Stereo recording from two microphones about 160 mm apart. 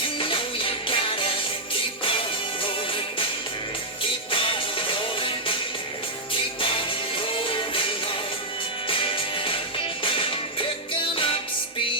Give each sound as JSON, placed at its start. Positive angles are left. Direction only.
{"t": 0.0, "sound": "music", "side_deg": 35}
{"t": 4.3, "sound": "music", "side_deg": 35}